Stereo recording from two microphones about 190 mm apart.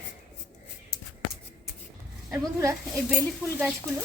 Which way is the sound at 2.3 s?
15° right (ahead or behind).